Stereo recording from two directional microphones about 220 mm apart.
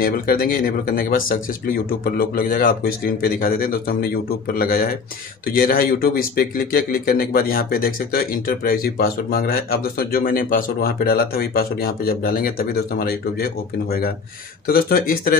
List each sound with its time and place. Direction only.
0.0 s speech: 40° left (ahead or behind)